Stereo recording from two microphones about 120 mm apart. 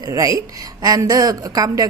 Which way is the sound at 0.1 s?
30° right (ahead or behind).